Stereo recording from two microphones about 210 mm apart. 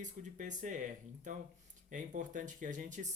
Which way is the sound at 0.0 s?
35° right (ahead or behind).